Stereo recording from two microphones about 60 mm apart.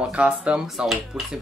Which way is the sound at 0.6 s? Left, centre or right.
Centre.